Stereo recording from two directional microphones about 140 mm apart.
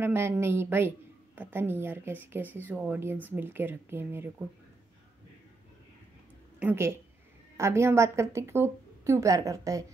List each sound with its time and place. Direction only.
0.0 s a woman's voice: 20° right (ahead or behind)
6.6 s a woman's voice: 20° right (ahead or behind)